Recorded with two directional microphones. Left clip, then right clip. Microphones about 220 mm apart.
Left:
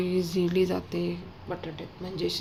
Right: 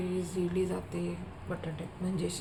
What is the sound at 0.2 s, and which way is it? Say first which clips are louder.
Speech: left 7 dB; 35° left (ahead or behind).